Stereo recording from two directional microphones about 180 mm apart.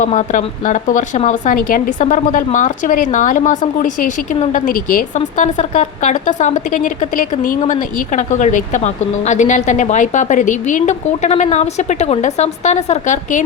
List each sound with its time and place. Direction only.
0.0 s speech: 40° left (ahead or behind)